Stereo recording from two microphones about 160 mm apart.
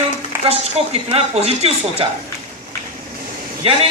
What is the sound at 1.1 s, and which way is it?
Speech, 40° right (ahead or behind).